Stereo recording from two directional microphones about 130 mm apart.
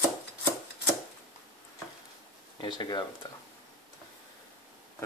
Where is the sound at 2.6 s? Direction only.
35° left (ahead or behind).